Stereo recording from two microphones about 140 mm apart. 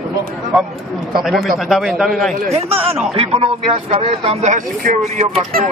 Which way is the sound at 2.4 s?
45° right (ahead or behind).